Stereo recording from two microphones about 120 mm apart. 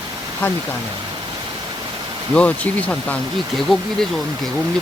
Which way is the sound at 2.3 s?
10° left (ahead or behind).